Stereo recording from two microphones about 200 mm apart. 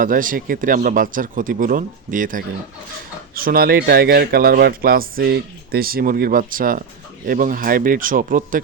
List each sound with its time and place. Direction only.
0.0 s speech: 45° right (ahead or behind)